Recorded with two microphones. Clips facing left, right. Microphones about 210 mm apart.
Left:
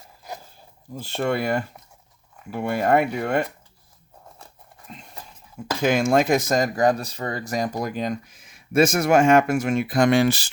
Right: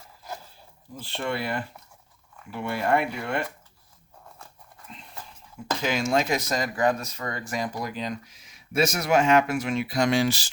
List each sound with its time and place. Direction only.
0.9 s speech: 45° left (ahead or behind)
5.8 s speech: 50° left (ahead or behind)